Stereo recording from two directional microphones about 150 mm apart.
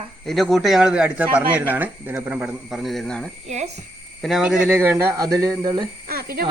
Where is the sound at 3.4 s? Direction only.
45° right (ahead or behind).